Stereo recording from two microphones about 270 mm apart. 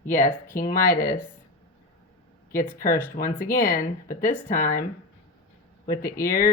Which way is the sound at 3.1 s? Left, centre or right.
Left.